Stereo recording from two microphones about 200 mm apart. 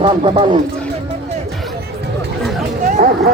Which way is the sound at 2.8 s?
45° right (ahead or behind).